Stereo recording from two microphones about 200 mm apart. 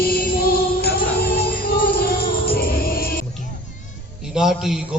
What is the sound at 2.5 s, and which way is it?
Music, 50° left (ahead or behind).